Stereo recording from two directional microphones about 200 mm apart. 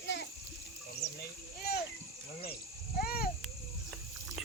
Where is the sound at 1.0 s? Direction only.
55° left (ahead or behind).